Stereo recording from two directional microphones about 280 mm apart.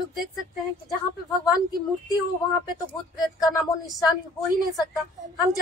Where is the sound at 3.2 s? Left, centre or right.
Centre.